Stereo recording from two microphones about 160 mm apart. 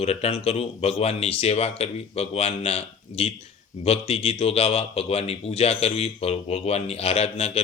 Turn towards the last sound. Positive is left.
turn(degrees=40)  # may be behind; listen again after turning